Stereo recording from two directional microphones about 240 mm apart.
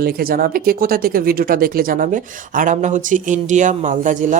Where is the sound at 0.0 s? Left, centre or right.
Right.